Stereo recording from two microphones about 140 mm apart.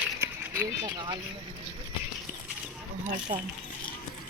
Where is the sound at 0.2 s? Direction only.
15° right (ahead or behind).